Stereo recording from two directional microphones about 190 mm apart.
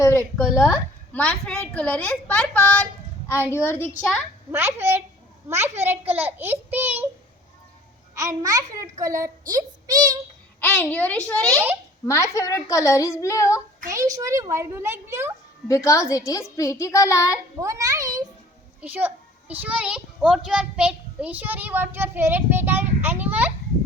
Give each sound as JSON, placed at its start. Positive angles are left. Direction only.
{"t": 0.0, "sound": "a woman's voice", "side_deg": 15}
{"t": 4.5, "sound": "a child's voice", "side_deg": -10}
{"t": 8.1, "sound": "a child's voice", "side_deg": -15}
{"t": 10.6, "sound": "a woman's voice", "side_deg": 10}
{"t": 11.5, "sound": "a child's voice", "side_deg": -10}
{"t": 12.0, "sound": "a woman's voice", "side_deg": 15}
{"t": 13.9, "sound": "a child's voice", "side_deg": -15}
{"t": 15.6, "sound": "a woman's voice", "side_deg": 15}
{"t": 17.6, "sound": "a child's voice", "side_deg": -15}